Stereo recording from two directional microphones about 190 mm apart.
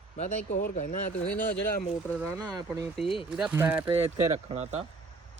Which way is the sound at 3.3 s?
5° right (ahead or behind).